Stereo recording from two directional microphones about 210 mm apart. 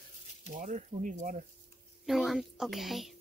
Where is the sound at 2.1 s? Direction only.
Centre (ahead or behind).